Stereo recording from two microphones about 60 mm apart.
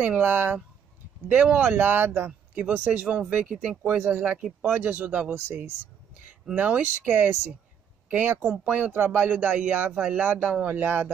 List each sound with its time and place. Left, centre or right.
0.0 s speech: right
1.3 s speech: right
1.8 s speech: right; by 3.7 s centre
3.8 s speech: right
6.5 s speech: right